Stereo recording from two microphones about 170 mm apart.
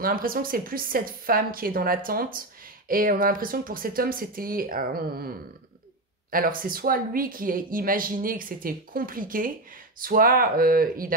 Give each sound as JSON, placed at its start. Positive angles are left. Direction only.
{"t": 0.0, "sound": "speech", "side_deg": -55}
{"t": 6.3, "sound": "speech", "side_deg": -55}